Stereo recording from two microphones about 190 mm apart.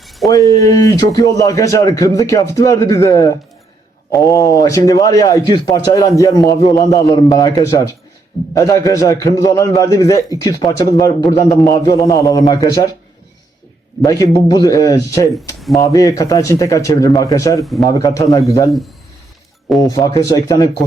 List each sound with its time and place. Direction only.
0.0 s a sound: centre (ahead or behind)
0.3 s speech: 20° left (ahead or behind)
14.0 s speech: 15° left (ahead or behind)
20.0 s speech: 15° left (ahead or behind)